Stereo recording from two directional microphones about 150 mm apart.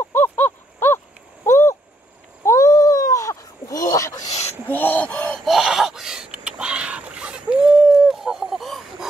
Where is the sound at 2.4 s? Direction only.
20° left (ahead or behind).